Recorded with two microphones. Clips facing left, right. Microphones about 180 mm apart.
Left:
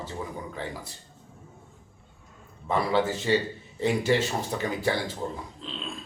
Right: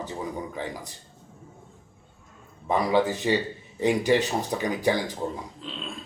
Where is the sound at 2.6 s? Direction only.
15° right (ahead or behind).